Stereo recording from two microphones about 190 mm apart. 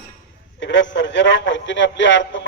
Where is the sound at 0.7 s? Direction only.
70° left (ahead or behind).